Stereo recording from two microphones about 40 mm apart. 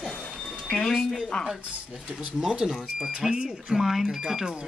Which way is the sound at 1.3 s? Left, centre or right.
Left.